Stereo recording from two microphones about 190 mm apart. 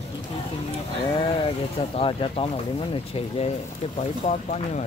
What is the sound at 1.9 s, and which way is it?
Speech, 30° left (ahead or behind).